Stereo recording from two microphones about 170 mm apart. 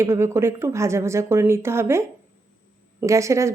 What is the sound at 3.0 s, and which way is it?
Speech, 20° right (ahead or behind).